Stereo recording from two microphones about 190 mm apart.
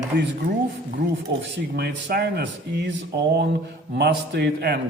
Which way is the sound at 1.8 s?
60° right (ahead or behind).